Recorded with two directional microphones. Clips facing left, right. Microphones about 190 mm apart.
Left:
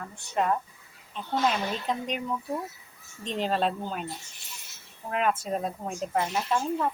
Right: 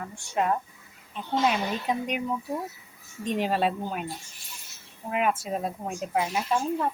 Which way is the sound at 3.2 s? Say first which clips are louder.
Right 2 dB; 10° right (ahead or behind).